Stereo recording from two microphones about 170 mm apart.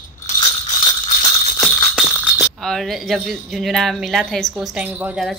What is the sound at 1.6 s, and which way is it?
Music, 5° right (ahead or behind).